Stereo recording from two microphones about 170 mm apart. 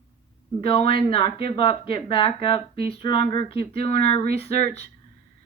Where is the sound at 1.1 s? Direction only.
30° left (ahead or behind).